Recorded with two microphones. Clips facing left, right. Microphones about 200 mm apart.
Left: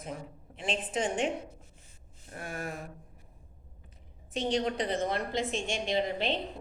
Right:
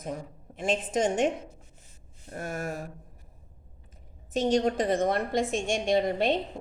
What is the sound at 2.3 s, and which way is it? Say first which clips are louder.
Speech: right 5 dB; 45° right (ahead or behind).